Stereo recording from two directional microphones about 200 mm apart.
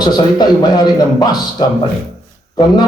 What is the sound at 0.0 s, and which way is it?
Speech, 20° left (ahead or behind).